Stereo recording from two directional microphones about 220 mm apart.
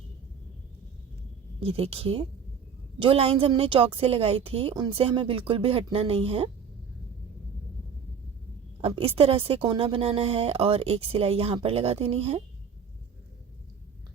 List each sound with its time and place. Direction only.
1.6 s a woman's voice: 25° right (ahead or behind)
8.8 s a woman's voice: 25° right (ahead or behind)